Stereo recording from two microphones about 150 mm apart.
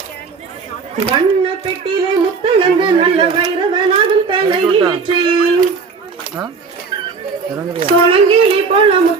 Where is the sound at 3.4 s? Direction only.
30° right (ahead or behind).